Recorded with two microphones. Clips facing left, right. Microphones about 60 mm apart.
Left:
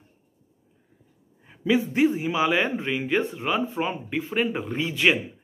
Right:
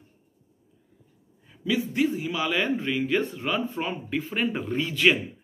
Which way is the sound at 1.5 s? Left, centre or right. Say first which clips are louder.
Left 4 dB; left.